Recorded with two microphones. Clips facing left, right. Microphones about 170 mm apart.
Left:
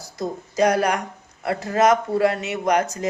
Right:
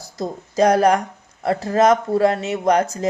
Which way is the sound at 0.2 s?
30° right (ahead or behind).